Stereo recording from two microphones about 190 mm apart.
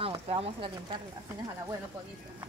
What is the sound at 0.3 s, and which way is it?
Speech, 30° right (ahead or behind).